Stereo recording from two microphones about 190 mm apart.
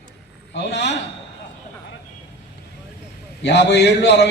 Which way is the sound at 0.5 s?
65° left (ahead or behind).